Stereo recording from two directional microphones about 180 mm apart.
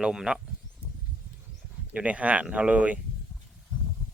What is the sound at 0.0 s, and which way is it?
Speech, 5° right (ahead or behind).